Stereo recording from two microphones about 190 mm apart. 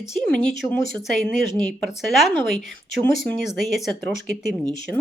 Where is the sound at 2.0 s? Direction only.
Centre (ahead or behind).